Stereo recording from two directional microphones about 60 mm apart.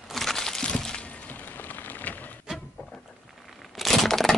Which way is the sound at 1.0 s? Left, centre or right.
Left.